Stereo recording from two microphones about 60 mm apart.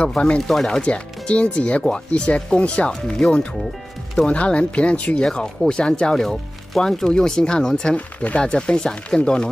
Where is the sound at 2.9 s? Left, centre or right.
Centre.